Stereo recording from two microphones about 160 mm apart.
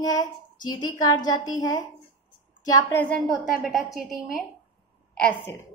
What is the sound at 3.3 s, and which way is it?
A woman's voice, centre (ahead or behind).